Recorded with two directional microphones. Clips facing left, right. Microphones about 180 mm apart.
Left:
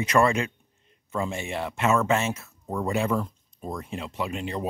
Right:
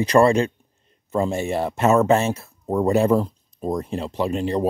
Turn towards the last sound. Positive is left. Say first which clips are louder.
# right 8 dB
turn(degrees=-35)  # may be behind; listen again after turning